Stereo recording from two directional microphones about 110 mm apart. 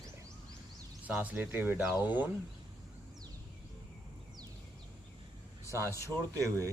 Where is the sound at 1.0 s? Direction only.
15° right (ahead or behind).